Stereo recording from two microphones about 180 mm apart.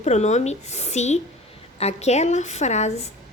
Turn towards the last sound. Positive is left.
turn(degrees=40)  # may be behind; listen again after turning